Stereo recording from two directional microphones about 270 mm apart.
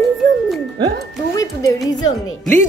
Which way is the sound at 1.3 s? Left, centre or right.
Centre.